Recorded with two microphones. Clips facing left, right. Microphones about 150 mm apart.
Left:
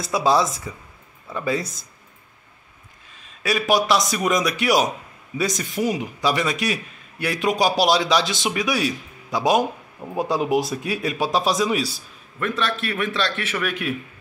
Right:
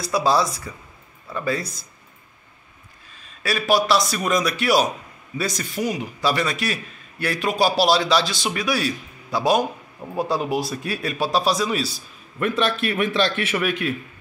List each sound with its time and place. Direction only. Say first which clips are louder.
0.0 s a man's voice: left 1 dB; 20° left (ahead or behind)
3.4 s a man's voice: even; 20° left (ahead or behind)
12.4 s a man's voice: right 3 dB; 10° right (ahead or behind)
13.7 s a man's voice: right 2 dB; 5° left (ahead or behind)